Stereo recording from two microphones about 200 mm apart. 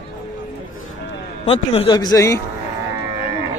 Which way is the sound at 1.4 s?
30° left (ahead or behind).